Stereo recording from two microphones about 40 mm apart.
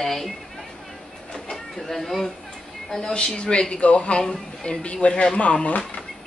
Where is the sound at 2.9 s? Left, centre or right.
Centre.